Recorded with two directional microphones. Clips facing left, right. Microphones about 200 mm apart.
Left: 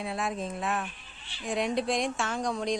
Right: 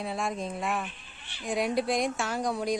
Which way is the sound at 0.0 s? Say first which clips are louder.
Even; centre (ahead or behind).